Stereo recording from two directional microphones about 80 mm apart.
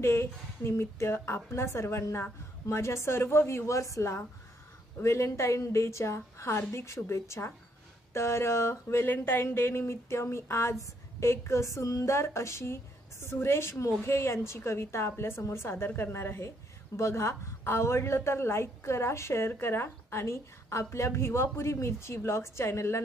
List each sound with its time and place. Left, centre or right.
0.0 s a woman's voice: left